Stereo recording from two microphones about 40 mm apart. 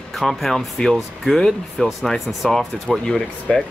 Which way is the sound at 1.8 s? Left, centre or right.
Centre.